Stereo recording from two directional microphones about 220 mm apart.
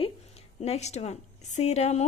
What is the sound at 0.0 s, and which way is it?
A woman's voice, 30° left (ahead or behind).